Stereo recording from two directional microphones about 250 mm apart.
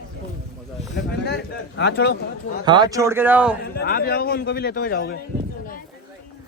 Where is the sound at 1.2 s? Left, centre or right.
Left.